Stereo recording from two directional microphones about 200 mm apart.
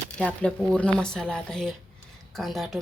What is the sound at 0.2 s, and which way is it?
Speech, 5° left (ahead or behind).